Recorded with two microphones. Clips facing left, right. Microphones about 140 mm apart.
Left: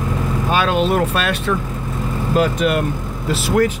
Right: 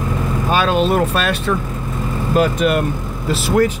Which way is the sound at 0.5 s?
35° right (ahead or behind).